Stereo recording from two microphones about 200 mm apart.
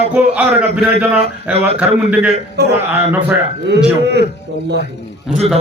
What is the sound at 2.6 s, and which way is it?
Speech, 55° right (ahead or behind).